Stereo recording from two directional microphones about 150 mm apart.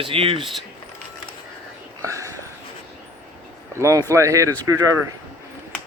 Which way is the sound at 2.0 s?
20° right (ahead or behind).